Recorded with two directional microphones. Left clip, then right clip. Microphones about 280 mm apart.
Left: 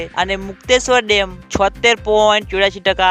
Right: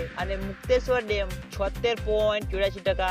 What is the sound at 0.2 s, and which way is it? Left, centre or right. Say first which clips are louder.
Speech: left 17 dB; left.